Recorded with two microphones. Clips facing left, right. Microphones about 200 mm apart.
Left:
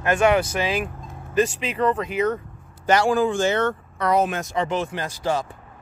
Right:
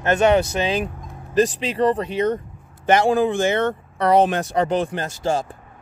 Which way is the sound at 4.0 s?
30° right (ahead or behind).